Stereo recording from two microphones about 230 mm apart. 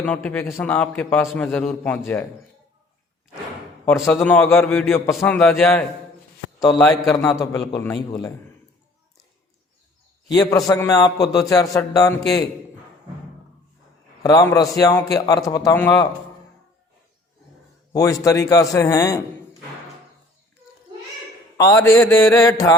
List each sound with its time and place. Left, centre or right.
0.0 s a man's voice: centre
3.8 s a man's voice: centre
7.0 s a man's voice: centre
10.2 s a man's voice: centre
14.2 s a man's voice: centre
17.9 s a man's voice: centre
21.6 s a man's voice: centre